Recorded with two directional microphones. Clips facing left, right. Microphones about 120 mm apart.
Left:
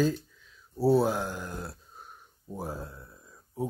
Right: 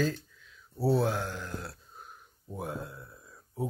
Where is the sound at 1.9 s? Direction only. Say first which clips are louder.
Even; centre (ahead or behind).